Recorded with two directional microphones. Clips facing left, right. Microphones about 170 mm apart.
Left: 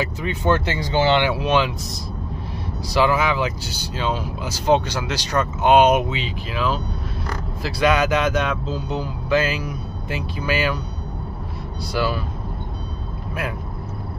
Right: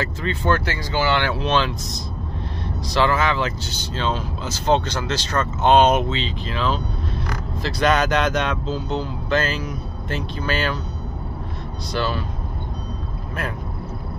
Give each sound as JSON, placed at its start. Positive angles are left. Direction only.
{"t": 0.0, "sound": "speech", "side_deg": 15}
{"t": 2.9, "sound": "speech", "side_deg": 10}
{"t": 11.9, "sound": "speech", "side_deg": 10}